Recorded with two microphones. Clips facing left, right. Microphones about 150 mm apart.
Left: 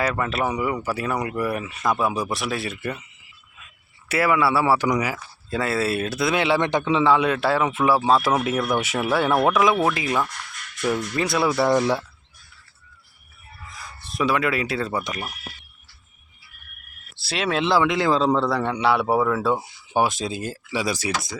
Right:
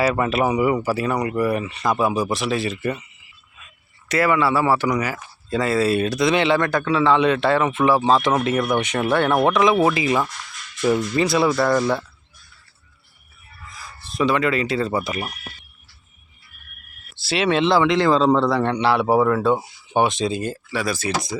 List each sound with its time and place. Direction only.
0.0 s speech: 10° right (ahead or behind)
4.1 s speech: 10° left (ahead or behind)
6.6 s a man's voice: 20° left (ahead or behind)
7.1 s speech: 5° left (ahead or behind)
11.5 s speech: 15° left (ahead or behind)
14.0 s speech: centre (ahead or behind)
17.2 s speech: centre (ahead or behind)
20.7 s speech: 15° left (ahead or behind)